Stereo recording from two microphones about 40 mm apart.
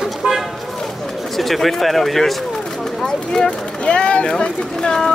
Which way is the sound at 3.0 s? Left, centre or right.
Centre.